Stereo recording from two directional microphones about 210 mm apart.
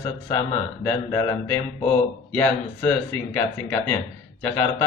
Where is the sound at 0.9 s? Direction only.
15° left (ahead or behind).